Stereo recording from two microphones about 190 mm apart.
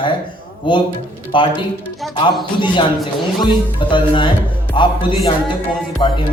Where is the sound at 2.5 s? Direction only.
25° left (ahead or behind).